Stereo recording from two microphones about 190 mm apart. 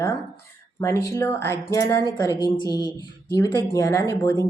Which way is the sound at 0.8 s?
15° left (ahead or behind).